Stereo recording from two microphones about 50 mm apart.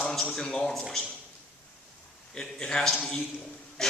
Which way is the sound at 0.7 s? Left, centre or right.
Centre.